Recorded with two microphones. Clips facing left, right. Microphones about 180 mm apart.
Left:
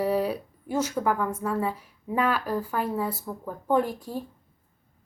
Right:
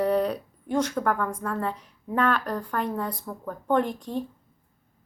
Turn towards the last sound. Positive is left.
turn(degrees=5)  # may be behind; listen again after turning